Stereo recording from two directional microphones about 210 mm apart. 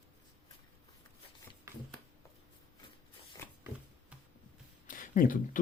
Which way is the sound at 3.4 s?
15° left (ahead or behind).